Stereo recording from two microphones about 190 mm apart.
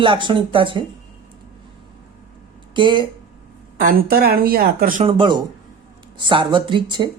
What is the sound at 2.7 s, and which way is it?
Speech, 25° right (ahead or behind).